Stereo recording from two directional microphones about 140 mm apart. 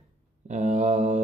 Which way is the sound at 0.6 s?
60° right (ahead or behind).